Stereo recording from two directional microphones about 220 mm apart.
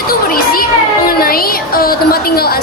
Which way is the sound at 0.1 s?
40° left (ahead or behind).